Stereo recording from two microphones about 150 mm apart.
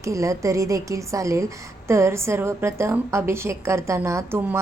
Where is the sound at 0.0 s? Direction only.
20° right (ahead or behind).